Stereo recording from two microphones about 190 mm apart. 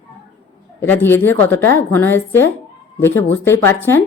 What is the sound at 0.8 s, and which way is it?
A woman's voice, 10° left (ahead or behind).